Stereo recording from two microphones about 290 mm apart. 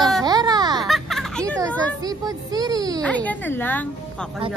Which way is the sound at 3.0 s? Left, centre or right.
Centre.